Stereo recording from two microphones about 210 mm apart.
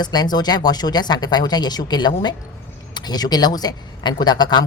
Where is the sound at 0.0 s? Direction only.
20° left (ahead or behind).